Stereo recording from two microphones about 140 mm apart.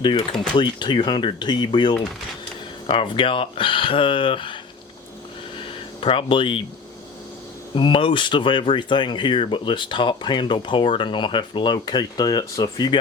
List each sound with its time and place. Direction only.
0.0 s speech: 35° left (ahead or behind)
6.0 s speech: 40° left (ahead or behind)
7.8 s speech: 40° left (ahead or behind)